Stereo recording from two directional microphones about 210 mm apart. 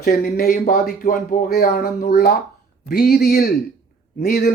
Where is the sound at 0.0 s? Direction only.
45° left (ahead or behind).